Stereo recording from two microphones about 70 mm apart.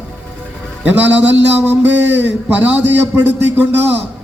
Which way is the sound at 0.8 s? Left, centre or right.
Right.